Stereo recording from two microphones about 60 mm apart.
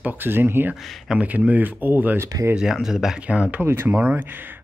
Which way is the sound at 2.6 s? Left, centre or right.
Centre.